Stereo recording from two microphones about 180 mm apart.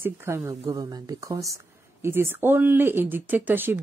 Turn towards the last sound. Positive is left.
turn(degrees=-10)  # may be behind; listen again after turning